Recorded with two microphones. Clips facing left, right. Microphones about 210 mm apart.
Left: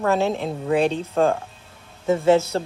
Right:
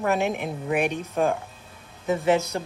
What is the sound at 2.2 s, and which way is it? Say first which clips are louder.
Speech: left 5 dB; 15° right (ahead or behind).